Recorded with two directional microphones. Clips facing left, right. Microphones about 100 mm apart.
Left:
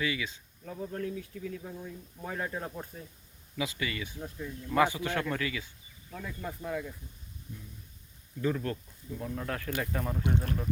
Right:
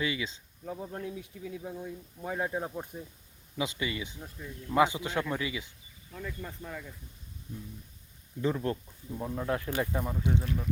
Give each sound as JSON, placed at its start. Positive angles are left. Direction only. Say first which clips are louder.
{"t": 0.0, "sound": "speech", "louder": "even", "side_deg": -25}
{"t": 6.1, "sound": "speech", "louder": "left 1 dB", "side_deg": 10}
{"t": 8.4, "sound": "speech", "louder": "right 1 dB", "side_deg": -20}
{"t": 10.2, "sound": "speech", "louder": "even", "side_deg": 50}